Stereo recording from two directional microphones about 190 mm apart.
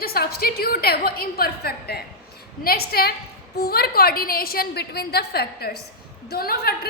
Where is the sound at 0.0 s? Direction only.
55° left (ahead or behind).